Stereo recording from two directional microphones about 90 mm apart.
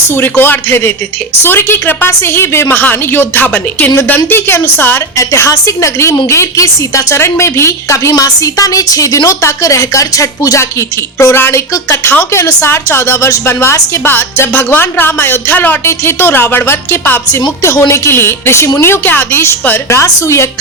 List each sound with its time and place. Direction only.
0.1 s a woman's voice: 25° left (ahead or behind)